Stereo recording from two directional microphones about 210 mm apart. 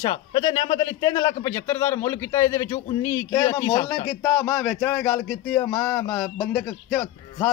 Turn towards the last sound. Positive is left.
turn(degrees=10)  # may be behind; listen again after turning